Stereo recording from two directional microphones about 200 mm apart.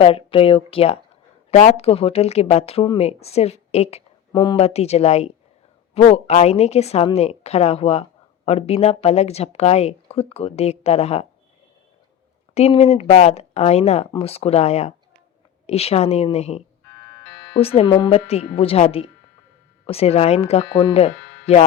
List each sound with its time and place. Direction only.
0.0 s a woman's voice: 25° left (ahead or behind)
4.3 s a woman's voice: 20° left (ahead or behind)
12.5 s a woman's voice: 30° left (ahead or behind)